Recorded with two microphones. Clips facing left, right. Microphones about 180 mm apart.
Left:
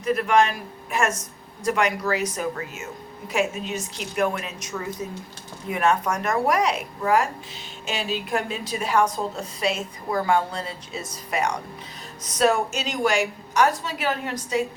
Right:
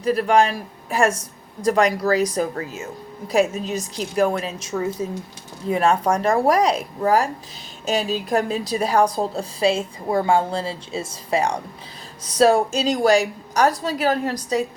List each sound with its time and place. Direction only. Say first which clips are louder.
0.0 s a woman's voice: right 3 dB; 35° right (ahead or behind)